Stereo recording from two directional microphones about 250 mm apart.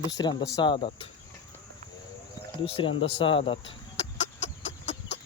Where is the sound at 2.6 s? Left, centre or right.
Left.